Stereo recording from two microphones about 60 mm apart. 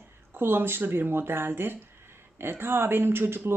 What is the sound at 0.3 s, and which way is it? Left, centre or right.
Speech, right.